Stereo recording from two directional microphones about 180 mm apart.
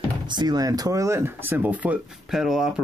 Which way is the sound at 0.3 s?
25° right (ahead or behind).